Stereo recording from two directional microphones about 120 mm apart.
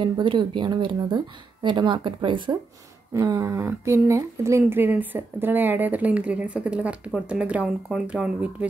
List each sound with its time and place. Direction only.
0.0 s speech: 45° right (ahead or behind)
3.1 s a sound: 25° right (ahead or behind)
3.8 s speech: 25° right (ahead or behind)